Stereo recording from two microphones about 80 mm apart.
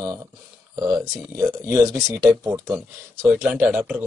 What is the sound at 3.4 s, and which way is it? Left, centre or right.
Speech, centre.